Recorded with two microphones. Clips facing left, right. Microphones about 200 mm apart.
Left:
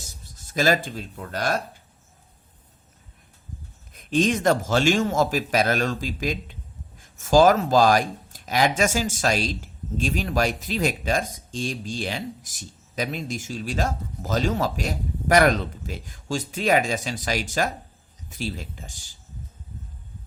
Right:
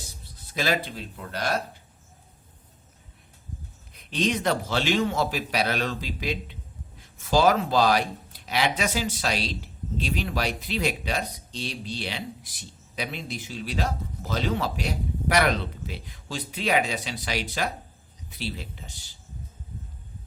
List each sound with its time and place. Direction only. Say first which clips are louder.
0.0 s speech: even; 45° left (ahead or behind)
3.9 s speech: left 5 dB; 45° left (ahead or behind)